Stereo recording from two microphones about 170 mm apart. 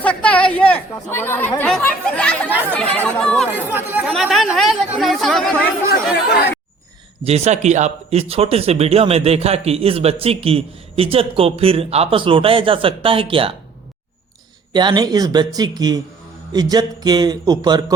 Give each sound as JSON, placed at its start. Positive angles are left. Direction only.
{"t": 0.0, "sound": "speech", "side_deg": 5}
{"t": 2.5, "sound": "speech", "side_deg": -10}
{"t": 2.9, "sound": "speech", "side_deg": 10}
{"t": 3.6, "sound": "speech", "side_deg": -10}
{"t": 7.3, "sound": "speech", "side_deg": -40}
{"t": 14.7, "sound": "a man's voice", "side_deg": -25}